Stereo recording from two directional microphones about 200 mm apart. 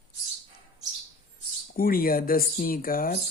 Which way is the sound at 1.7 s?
45° left (ahead or behind).